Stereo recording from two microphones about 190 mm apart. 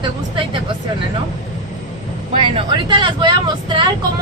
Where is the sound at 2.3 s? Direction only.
25° right (ahead or behind).